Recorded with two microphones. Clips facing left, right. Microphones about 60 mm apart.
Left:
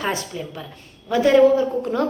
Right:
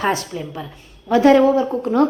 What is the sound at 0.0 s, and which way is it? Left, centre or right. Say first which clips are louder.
A woman's voice: right 4 dB; right.